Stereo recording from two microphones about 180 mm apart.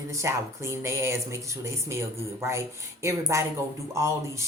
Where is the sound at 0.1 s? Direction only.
15° right (ahead or behind).